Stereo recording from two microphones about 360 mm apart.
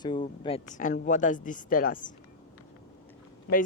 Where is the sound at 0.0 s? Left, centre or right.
Centre.